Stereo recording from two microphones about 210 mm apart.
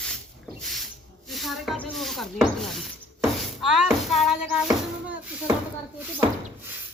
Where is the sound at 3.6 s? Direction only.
Centre (ahead or behind).